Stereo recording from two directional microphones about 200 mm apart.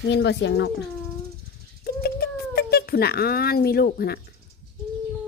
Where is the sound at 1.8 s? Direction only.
50° left (ahead or behind).